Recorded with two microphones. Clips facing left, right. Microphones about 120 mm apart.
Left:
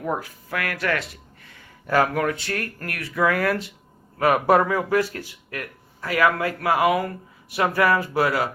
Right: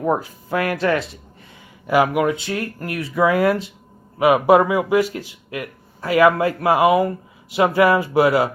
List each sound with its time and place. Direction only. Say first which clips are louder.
0.0 s speech: right 7 dB; 25° right (ahead or behind)